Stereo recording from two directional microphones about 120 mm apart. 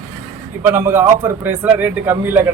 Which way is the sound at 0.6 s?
20° right (ahead or behind).